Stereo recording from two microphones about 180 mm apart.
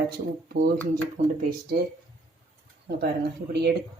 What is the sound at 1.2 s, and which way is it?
Speech, 40° right (ahead or behind).